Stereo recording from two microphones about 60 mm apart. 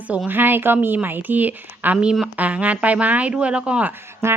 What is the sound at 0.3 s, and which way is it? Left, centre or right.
Speech, right.